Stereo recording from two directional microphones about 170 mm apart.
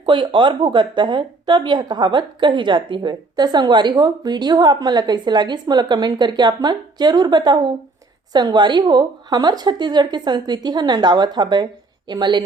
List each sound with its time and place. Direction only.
0.0 s a woman's voice: 30° right (ahead or behind)